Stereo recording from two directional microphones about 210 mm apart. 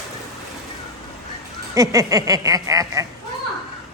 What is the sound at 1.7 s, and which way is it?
A man's voice, 15° right (ahead or behind).